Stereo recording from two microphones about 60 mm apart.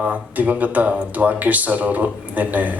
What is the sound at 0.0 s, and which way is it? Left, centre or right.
Speech, right.